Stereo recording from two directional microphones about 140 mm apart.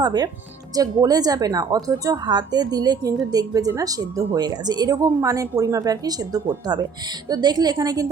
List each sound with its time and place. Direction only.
0.0 s a woman's voice: 30° right (ahead or behind)